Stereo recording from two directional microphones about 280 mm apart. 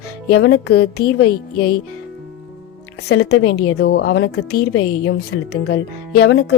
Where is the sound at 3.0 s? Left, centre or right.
Left.